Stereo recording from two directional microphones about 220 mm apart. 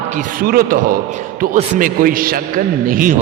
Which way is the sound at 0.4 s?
40° right (ahead or behind).